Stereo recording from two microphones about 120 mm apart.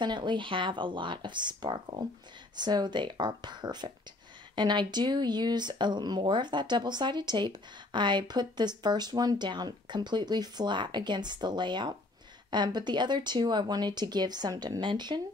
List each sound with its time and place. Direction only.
0.0 s speech: 40° right (ahead or behind)